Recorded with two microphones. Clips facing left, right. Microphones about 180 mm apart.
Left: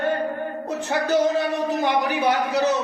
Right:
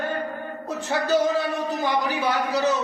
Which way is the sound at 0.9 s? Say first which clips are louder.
Left 1 dB; 20° left (ahead or behind).